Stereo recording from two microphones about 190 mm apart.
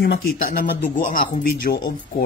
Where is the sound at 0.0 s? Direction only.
50° left (ahead or behind).